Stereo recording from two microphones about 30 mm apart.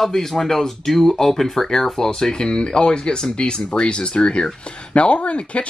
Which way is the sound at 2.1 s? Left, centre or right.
Left.